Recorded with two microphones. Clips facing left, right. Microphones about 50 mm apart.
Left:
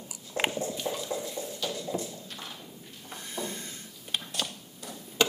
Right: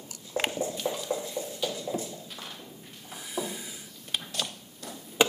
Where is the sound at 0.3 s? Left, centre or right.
Centre.